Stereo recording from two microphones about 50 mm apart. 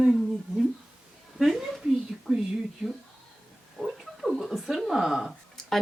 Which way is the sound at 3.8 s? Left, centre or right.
Centre.